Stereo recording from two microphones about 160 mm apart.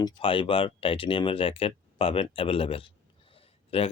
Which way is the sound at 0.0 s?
35° left (ahead or behind).